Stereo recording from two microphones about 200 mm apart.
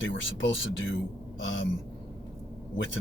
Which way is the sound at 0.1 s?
70° left (ahead or behind).